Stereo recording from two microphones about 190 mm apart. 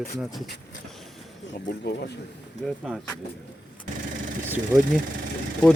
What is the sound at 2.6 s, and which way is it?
Speech, centre (ahead or behind).